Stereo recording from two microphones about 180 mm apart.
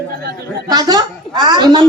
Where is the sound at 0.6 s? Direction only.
20° right (ahead or behind).